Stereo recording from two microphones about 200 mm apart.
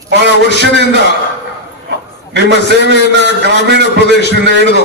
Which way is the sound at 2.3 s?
60° right (ahead or behind).